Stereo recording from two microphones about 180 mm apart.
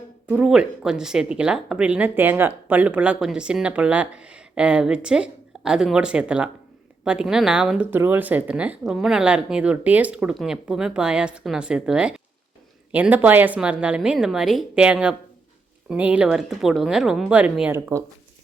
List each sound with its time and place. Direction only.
0.3 s speech: 5° right (ahead or behind)